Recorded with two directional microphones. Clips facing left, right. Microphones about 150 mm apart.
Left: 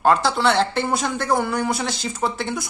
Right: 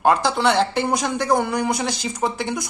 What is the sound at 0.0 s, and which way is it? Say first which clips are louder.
Speech: even; 15° right (ahead or behind).